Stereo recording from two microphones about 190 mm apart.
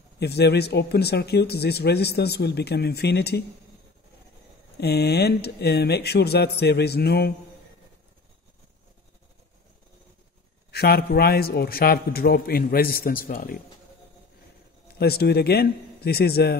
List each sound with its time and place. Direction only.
0.2 s speech: 60° left (ahead or behind)
4.7 s speech: 60° left (ahead or behind)
10.7 s a man's voice: 55° left (ahead or behind)
15.0 s speech: 55° left (ahead or behind)